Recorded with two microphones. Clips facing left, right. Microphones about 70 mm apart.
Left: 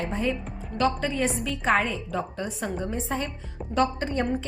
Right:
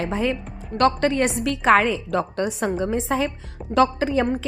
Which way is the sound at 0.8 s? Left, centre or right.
Right.